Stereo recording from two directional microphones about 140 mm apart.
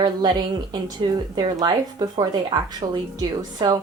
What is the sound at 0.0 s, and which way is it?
Speech, 30° right (ahead or behind).